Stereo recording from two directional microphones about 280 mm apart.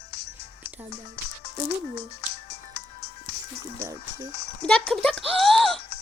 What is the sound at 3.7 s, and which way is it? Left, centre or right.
Speech, centre.